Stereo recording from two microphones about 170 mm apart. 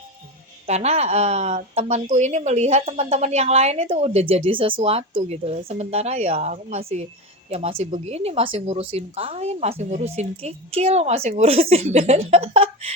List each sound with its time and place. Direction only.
0.7 s a woman's voice: 40° right (ahead or behind)